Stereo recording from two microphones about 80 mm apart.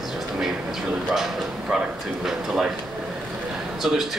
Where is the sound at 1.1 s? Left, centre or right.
Centre.